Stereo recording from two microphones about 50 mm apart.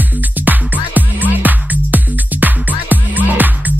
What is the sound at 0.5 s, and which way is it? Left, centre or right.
Music, right.